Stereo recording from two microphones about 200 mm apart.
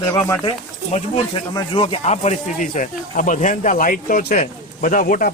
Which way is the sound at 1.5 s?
25° left (ahead or behind).